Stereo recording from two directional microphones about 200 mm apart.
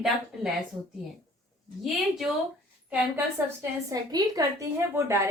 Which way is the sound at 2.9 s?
15° right (ahead or behind).